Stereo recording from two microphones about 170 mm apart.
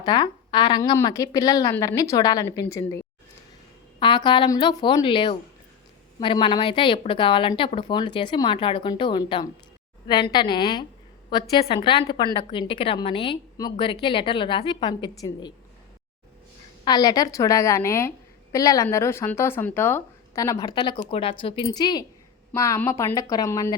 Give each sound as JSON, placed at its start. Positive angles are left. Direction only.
{"t": 0.0, "sound": "a woman's voice", "side_deg": 25}
{"t": 4.0, "sound": "speech", "side_deg": 30}
{"t": 16.8, "sound": "speech", "side_deg": 25}